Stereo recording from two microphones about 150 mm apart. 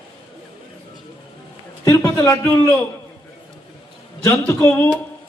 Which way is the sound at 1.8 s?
20° left (ahead or behind).